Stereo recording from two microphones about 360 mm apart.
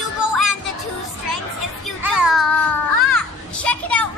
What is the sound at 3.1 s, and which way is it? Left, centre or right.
Children playing, centre.